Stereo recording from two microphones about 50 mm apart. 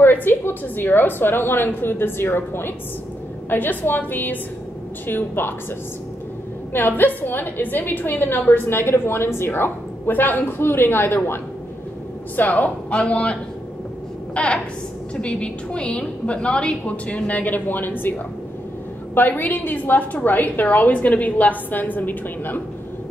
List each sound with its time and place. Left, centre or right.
0.0 s a woman's voice: left
6.7 s a woman's voice: left
8.6 s a woman's voice: left
10.6 s a woman's voice: left
12.4 s a woman's voice: left
19.1 s a woman's voice: left